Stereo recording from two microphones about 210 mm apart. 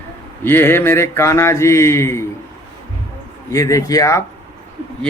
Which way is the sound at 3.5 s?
15° left (ahead or behind).